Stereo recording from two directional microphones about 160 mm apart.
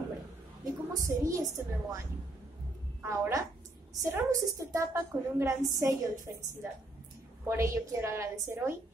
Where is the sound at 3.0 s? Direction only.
20° right (ahead or behind).